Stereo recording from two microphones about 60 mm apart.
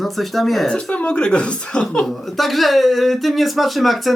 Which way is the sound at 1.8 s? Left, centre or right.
Centre.